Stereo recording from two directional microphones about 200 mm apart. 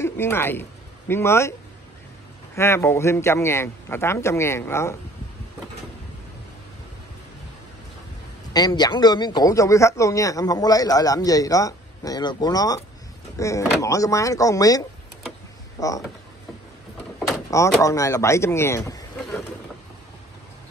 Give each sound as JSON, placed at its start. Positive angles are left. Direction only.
{"t": 0.0, "sound": "speech", "side_deg": 10}
{"t": 2.5, "sound": "speech", "side_deg": 15}
{"t": 8.5, "sound": "speech", "side_deg": 20}
{"t": 17.5, "sound": "speech", "side_deg": 15}